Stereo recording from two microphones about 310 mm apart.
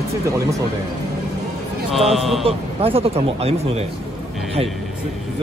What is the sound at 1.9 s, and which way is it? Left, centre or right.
Speech, centre.